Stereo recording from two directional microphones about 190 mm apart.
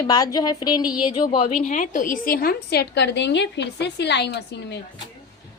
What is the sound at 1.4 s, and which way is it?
A woman's voice, 35° left (ahead or behind).